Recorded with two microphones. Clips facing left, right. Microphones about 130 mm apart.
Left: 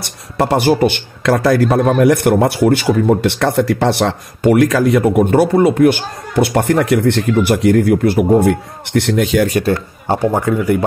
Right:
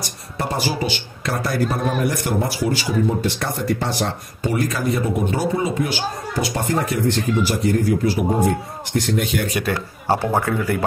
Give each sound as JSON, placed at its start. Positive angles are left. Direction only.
{"t": 0.0, "sound": "a man's voice", "side_deg": 70}
{"t": 10.1, "sound": "speech", "side_deg": 15}